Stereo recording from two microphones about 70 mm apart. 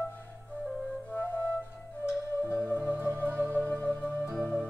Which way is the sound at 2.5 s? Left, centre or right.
Left.